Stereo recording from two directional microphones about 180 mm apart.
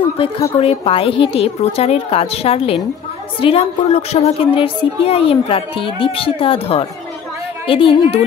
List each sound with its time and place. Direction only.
0.6 s a woman's voice: 30° left (ahead or behind)